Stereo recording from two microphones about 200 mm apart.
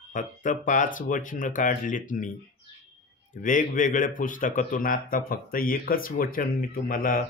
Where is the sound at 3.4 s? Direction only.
40° left (ahead or behind).